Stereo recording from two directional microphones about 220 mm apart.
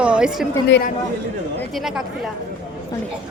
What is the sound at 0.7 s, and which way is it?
Speech, 50° left (ahead or behind).